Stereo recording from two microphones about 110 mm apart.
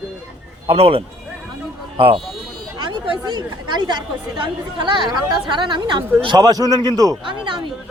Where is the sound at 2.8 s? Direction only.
45° right (ahead or behind).